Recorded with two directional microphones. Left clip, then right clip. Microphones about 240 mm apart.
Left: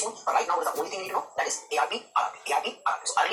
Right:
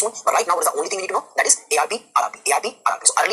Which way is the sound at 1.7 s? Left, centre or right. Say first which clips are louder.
Right 3 dB; right.